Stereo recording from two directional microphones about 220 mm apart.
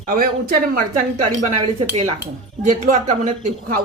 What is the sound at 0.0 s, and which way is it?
Speech, 40° right (ahead or behind).